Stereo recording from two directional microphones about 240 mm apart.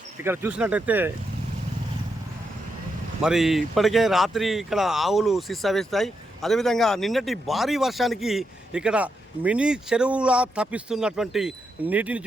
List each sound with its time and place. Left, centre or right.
0.3 s speech: centre
3.2 s speech: centre